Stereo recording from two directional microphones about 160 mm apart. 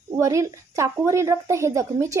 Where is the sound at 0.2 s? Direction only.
20° right (ahead or behind).